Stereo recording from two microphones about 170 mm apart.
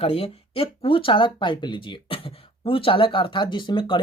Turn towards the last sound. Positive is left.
turn(degrees=30)  # may be behind; listen again after turning